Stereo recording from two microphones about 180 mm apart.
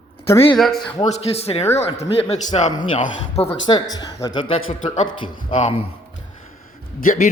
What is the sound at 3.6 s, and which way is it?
A man's voice, 25° left (ahead or behind).